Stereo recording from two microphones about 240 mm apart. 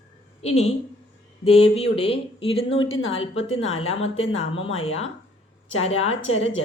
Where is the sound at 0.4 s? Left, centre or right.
Left.